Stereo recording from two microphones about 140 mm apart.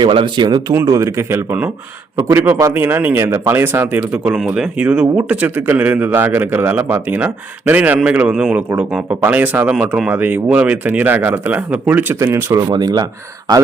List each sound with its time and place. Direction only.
0.0 s speech: 35° right (ahead or behind)
0.7 s a man's voice: 20° right (ahead or behind)
12.6 s speech: 30° right (ahead or behind)